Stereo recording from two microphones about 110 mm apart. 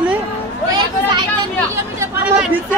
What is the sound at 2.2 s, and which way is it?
Speech, 10° right (ahead or behind).